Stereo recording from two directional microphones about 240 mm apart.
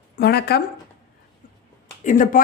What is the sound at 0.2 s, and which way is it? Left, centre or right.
Speech, left.